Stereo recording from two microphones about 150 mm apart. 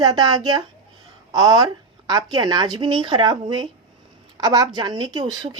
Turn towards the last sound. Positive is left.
turn(degrees=-25)  # may be behind; listen again after turning